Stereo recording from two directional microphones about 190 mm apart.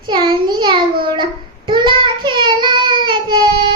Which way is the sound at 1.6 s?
25° right (ahead or behind).